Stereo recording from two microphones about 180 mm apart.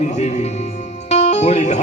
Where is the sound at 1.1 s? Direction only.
40° left (ahead or behind).